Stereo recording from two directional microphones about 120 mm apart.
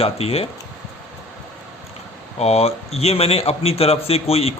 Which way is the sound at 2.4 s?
60° left (ahead or behind).